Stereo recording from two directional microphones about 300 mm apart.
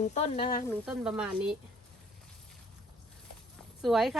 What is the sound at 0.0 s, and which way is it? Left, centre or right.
Speech, left.